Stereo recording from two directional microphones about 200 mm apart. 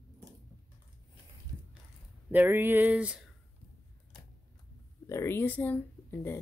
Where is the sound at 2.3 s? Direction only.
10° right (ahead or behind).